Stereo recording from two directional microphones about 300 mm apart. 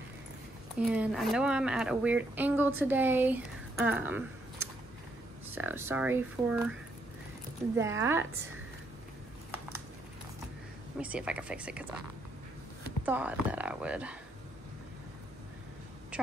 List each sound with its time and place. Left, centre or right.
0.7 s speech: centre
5.5 s speech: centre
7.7 s speech: centre
11.0 s speech: centre
13.0 s speech: centre